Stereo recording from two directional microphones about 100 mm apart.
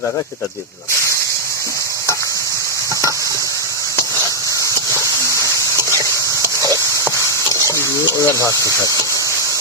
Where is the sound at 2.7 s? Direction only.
30° right (ahead or behind).